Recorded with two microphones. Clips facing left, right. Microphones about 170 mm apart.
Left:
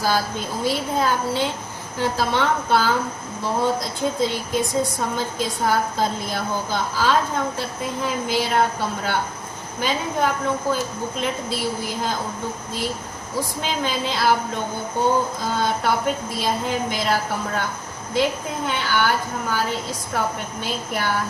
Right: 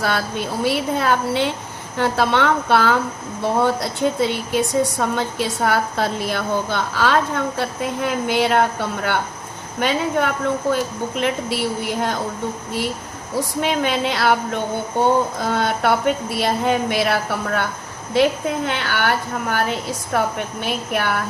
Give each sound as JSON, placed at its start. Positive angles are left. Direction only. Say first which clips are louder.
{"t": 0.0, "sound": "a woman's voice", "louder": "right 1 dB", "side_deg": -70}
{"t": 13.6, "sound": "speech", "louder": "right 7 dB", "side_deg": -65}
{"t": 15.4, "sound": "a woman's voice", "louder": "right 3 dB", "side_deg": -65}